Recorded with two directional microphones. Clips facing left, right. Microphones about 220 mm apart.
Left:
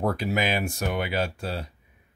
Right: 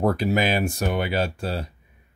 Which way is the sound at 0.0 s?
40° right (ahead or behind).